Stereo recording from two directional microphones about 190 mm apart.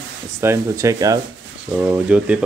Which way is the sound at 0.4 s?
15° right (ahead or behind).